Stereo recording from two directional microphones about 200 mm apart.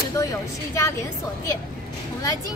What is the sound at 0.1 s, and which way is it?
Speech, 15° left (ahead or behind).